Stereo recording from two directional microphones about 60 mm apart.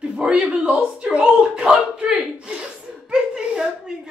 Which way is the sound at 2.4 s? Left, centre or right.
Centre.